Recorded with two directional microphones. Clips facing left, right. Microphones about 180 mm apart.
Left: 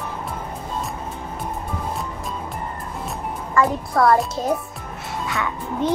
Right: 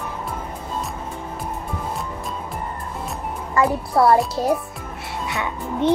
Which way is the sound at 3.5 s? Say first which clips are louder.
Right 1 dB; 30° right (ahead or behind).